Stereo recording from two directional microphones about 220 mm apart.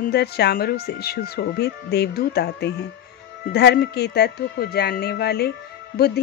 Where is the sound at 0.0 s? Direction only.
45° left (ahead or behind).